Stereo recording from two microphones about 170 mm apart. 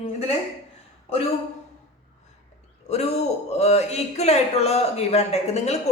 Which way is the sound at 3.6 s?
40° left (ahead or behind).